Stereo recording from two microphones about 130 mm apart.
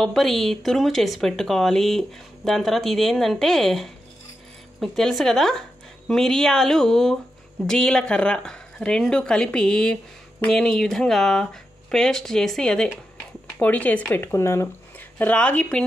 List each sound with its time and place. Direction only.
0.0 s speech: centre (ahead or behind)